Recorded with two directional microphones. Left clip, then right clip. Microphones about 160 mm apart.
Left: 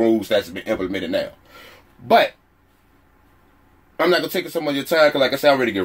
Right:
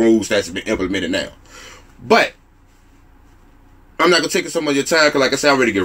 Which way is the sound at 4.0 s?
15° left (ahead or behind).